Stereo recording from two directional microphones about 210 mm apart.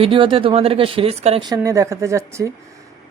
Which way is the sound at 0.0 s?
25° right (ahead or behind).